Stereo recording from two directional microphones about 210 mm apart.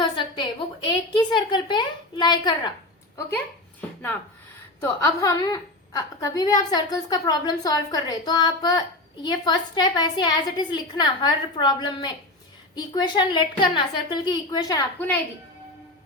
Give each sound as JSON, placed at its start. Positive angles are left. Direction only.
{"t": 0.0, "sound": "a woman's voice", "side_deg": 25}
{"t": 3.2, "sound": "a woman's voice", "side_deg": 10}